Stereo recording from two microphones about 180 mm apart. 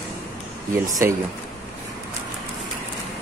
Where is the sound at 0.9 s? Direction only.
15° right (ahead or behind).